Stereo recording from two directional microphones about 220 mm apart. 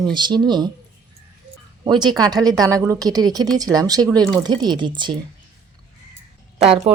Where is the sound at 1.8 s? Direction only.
20° right (ahead or behind).